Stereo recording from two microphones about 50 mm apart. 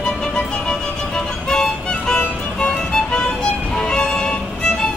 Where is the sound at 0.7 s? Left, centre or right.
Centre.